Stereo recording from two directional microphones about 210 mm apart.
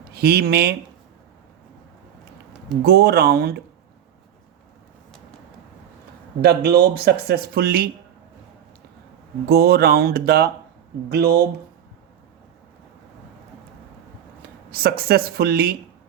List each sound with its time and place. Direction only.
0.1 s speech: 50° right (ahead or behind)
2.8 s speech: 50° right (ahead or behind)
6.4 s speech: 50° right (ahead or behind)
9.5 s speech: 45° right (ahead or behind)
14.7 s speech: 45° right (ahead or behind)